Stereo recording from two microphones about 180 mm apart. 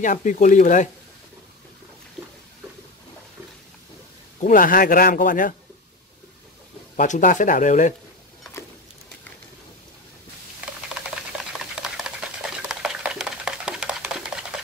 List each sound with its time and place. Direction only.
0.0 s a man's voice: 45° left (ahead or behind)
4.4 s a man's voice: 50° left (ahead or behind)
7.0 s a man's voice: 45° left (ahead or behind)
11.5 s stir: 5° right (ahead or behind)